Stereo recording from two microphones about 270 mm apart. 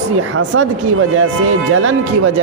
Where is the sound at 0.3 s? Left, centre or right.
Right.